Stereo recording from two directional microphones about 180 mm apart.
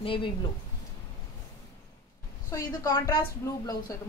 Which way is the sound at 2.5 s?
20° left (ahead or behind).